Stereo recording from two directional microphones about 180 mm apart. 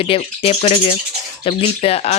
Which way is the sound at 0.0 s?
30° left (ahead or behind).